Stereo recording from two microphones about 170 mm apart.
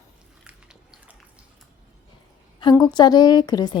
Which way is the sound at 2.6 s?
25° left (ahead or behind).